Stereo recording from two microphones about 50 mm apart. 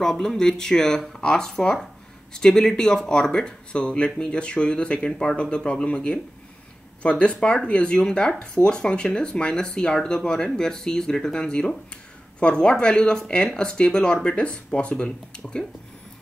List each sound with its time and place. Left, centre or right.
0.0 s speech: centre